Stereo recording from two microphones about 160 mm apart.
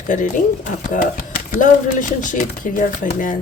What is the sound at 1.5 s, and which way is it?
Speech, 50° left (ahead or behind).